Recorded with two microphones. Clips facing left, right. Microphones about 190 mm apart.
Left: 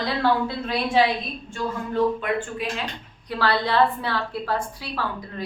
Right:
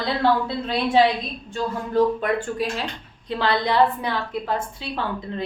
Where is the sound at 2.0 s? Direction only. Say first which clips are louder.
Right 3 dB; 40° right (ahead or behind).